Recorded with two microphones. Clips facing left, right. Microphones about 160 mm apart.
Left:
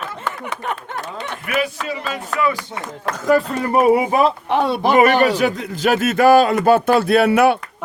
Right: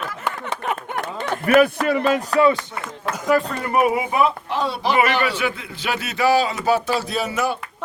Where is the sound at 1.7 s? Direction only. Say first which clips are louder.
Right 7 dB; 55° right (ahead or behind).